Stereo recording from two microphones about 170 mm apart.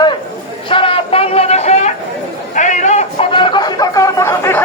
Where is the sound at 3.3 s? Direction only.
30° left (ahead or behind).